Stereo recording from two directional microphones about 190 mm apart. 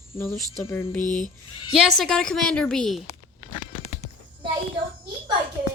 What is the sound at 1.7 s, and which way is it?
A woman's voice, centre (ahead or behind).